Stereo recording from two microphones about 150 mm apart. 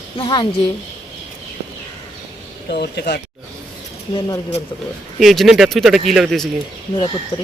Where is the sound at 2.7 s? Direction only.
90° left.